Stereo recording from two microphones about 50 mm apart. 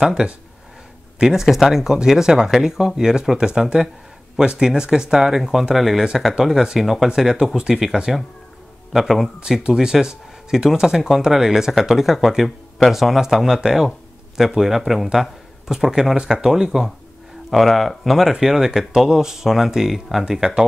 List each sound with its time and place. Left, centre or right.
0.0 s speech: centre
9.4 s speech: centre
17.5 s speech: centre